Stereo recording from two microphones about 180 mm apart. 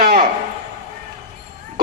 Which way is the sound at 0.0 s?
55° right (ahead or behind).